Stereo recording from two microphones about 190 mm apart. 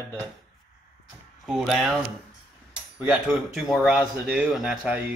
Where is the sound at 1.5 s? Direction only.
Centre (ahead or behind).